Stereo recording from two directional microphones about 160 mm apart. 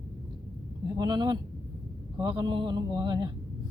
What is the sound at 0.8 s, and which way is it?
A man's voice, 25° right (ahead or behind).